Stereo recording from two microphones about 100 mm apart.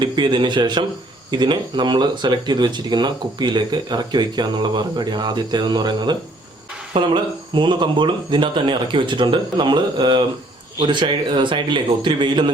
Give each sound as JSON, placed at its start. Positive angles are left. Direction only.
{"t": 0.0, "sound": "speech", "side_deg": -50}